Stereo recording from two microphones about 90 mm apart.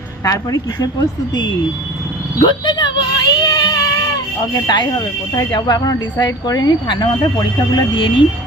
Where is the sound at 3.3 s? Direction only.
50° left (ahead or behind).